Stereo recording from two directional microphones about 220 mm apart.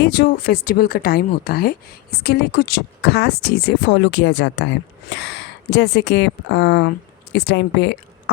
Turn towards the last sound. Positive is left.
turn(degrees=55)  # may be behind; listen again after turning